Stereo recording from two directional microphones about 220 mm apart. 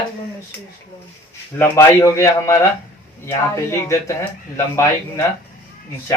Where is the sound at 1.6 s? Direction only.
10° left (ahead or behind).